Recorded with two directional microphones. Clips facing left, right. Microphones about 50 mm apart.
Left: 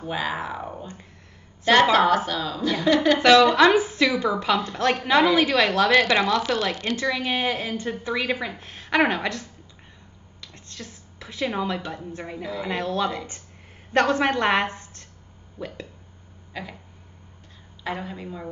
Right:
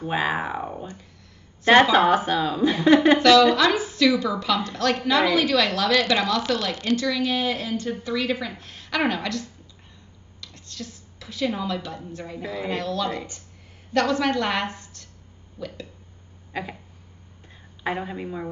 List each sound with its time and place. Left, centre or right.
0.1 s a woman's voice: right
3.2 s a woman's voice: left
5.9 s speech: centre
7.0 s a woman's voice: left
17.8 s speech: right